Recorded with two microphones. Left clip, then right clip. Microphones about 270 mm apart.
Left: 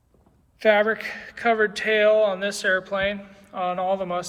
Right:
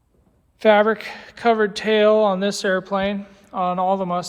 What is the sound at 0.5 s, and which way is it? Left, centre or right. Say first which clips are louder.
Speech: right 4 dB; right.